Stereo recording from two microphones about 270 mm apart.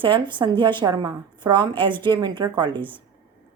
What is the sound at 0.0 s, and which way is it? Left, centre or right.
A woman's voice, centre.